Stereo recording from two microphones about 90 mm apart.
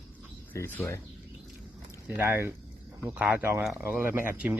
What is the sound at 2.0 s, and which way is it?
Speech, 25° right (ahead or behind).